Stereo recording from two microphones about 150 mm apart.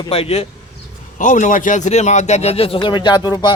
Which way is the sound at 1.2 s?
60° left (ahead or behind).